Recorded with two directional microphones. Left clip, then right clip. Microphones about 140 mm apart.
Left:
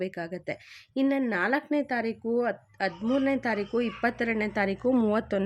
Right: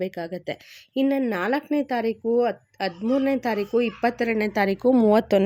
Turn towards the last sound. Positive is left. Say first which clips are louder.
# right 7 dB
turn(degrees=-40)  # may be behind; listen again after turning